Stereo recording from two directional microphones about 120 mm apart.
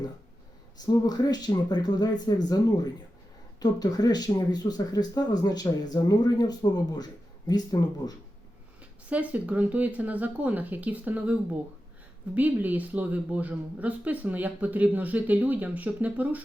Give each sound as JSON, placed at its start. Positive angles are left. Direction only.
{"t": 0.8, "sound": "speech", "side_deg": 35}
{"t": 9.0, "sound": "a woman's voice", "side_deg": -10}